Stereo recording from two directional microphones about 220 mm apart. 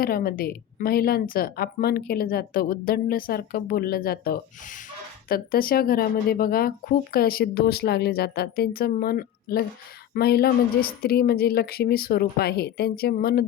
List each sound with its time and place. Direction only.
0.0 s a woman's voice: 40° left (ahead or behind)